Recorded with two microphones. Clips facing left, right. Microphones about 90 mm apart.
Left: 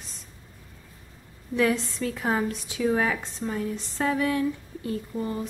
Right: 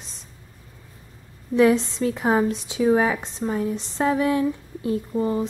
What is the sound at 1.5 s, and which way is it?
A woman's voice, 20° right (ahead or behind).